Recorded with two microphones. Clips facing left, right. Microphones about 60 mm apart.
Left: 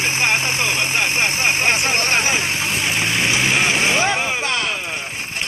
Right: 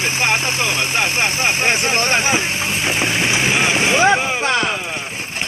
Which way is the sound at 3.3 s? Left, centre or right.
Right.